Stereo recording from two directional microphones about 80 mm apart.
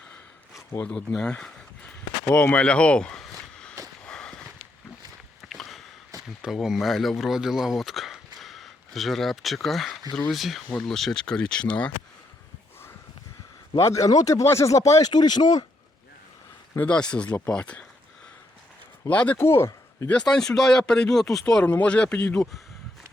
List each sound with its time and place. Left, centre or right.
0.9 s speech: centre
2.3 s a sound: centre
4.0 s walk: centre
5.4 s a sound: centre
6.4 s speech: centre
13.7 s speech: left
15.1 s speech: left
16.8 s speech: centre
19.0 s speech: centre
19.4 s speech: left
20.1 s speech: centre